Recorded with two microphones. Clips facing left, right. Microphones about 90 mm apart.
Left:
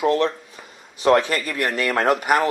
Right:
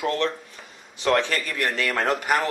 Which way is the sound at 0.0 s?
10° left (ahead or behind).